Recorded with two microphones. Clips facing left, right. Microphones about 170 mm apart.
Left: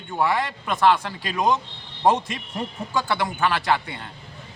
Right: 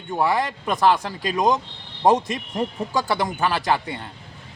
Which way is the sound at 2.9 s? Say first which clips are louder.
Right 2 dB; 40° right (ahead or behind).